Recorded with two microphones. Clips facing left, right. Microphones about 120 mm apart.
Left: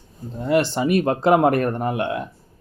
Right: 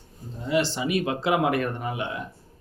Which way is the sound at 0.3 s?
55° left (ahead or behind).